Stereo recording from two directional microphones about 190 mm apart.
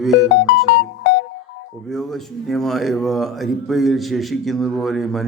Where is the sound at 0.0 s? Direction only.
Centre (ahead or behind).